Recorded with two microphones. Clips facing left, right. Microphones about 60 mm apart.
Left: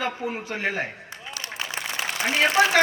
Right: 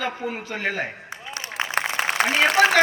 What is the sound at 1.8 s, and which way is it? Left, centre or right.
Applause, right.